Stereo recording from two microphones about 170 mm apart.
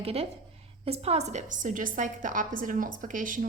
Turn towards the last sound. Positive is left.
turn(degrees=-50)  # may be behind; listen again after turning